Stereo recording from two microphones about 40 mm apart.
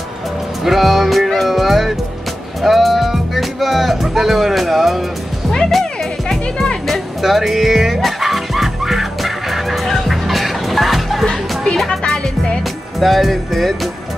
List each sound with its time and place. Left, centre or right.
0.7 s speech: centre
6.9 s music: centre
11.2 s music: centre
13.0 s speech: centre